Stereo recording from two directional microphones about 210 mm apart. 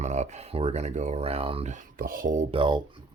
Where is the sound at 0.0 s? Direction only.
35° right (ahead or behind).